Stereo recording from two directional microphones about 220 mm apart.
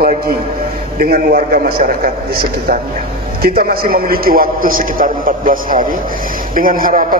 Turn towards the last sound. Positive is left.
turn(degrees=-40)  # may be behind; listen again after turning